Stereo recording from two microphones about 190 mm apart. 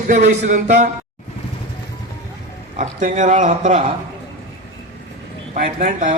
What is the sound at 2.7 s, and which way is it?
A man's voice, 40° right (ahead or behind).